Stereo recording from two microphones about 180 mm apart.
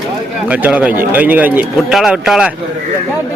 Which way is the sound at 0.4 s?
10° right (ahead or behind).